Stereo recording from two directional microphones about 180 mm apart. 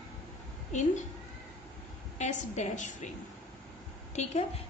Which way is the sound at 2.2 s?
40° left (ahead or behind).